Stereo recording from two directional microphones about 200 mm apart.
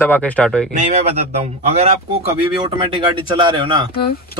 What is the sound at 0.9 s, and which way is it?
Speech, 30° right (ahead or behind).